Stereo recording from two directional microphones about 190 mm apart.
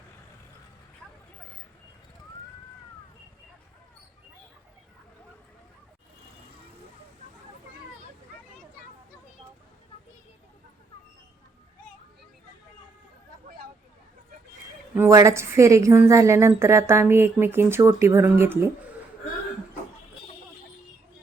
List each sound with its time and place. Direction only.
14.9 s a woman's voice: 15° right (ahead or behind)